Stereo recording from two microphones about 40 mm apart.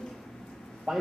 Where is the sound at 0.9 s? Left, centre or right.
Centre.